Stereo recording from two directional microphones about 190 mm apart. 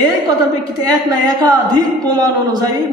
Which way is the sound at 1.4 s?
20° right (ahead or behind).